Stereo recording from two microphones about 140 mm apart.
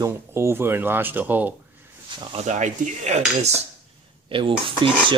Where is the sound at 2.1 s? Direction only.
35° right (ahead or behind).